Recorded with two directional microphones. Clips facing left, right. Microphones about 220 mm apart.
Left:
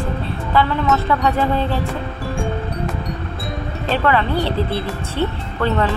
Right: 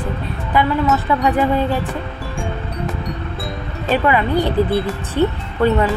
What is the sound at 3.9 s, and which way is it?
Speech, 15° right (ahead or behind).